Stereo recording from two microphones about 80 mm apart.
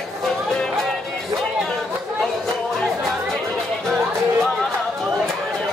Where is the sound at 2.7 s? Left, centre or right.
Centre.